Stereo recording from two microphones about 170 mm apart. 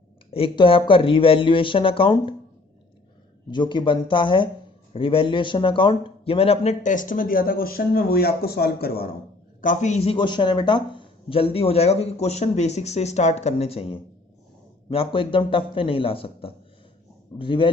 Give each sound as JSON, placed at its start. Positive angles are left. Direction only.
{"t": 0.3, "sound": "speech", "side_deg": 35}
{"t": 3.5, "sound": "a man's voice", "side_deg": 25}
{"t": 9.6, "sound": "speech", "side_deg": 50}